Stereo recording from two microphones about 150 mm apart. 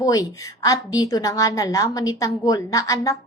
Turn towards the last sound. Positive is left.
turn(degrees=25)  # may be behind; listen again after turning